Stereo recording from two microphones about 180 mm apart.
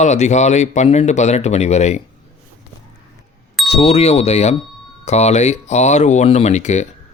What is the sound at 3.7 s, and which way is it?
Speech, 35° left (ahead or behind).